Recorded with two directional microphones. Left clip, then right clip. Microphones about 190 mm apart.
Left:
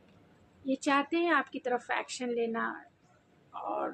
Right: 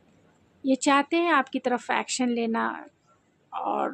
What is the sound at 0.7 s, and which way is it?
Speech, 50° right (ahead or behind).